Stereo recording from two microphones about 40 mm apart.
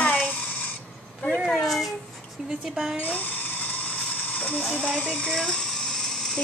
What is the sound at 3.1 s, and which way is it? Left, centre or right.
Dental drill, left.